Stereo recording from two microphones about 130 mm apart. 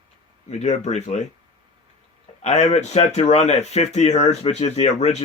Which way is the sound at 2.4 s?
60° left (ahead or behind).